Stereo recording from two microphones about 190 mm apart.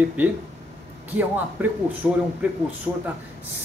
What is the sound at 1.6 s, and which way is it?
Speech, 10° right (ahead or behind).